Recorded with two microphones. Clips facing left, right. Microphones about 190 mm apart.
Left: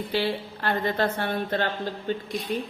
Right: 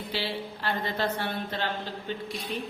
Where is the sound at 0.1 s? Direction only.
50° left (ahead or behind).